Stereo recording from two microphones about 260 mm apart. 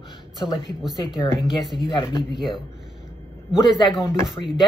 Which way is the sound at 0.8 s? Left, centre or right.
Centre.